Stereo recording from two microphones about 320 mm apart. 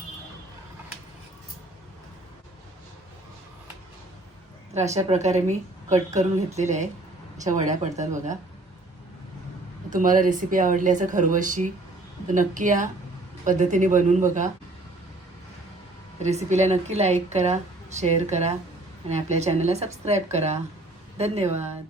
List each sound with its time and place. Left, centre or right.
4.7 s a woman's voice: right
9.9 s a woman's voice: right
16.2 s a woman's voice: right